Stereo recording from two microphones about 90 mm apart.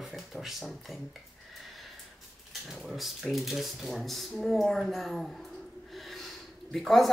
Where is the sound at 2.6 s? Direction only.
Centre (ahead or behind).